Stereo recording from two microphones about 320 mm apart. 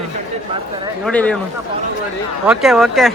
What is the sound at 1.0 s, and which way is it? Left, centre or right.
Speech, centre.